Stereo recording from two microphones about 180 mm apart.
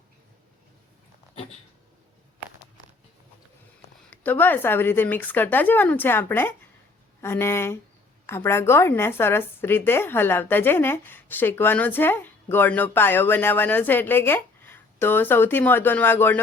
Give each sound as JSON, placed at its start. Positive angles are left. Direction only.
{"t": 4.1, "sound": "a woman's voice", "side_deg": 10}